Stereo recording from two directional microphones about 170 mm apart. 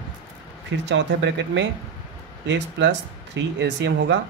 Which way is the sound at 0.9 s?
90° right.